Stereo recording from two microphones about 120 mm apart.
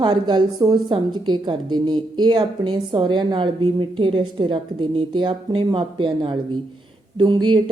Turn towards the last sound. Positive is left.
turn(degrees=-40)  # may be behind; listen again after turning